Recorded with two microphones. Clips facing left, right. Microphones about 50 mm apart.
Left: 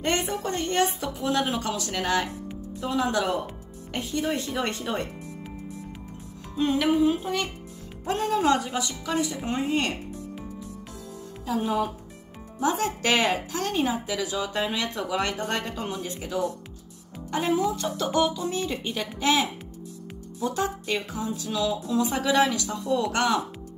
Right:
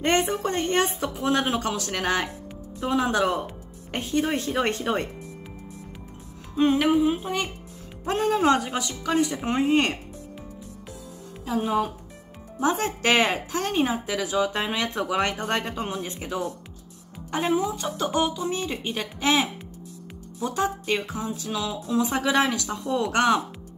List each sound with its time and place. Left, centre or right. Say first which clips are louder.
0.0 s speech: right 4 dB; right
6.5 s speech: right 3 dB; right
11.4 s speech: right 1 dB; centre
12.5 s speech: right 1 dB; right
20.3 s speech: right 1 dB; right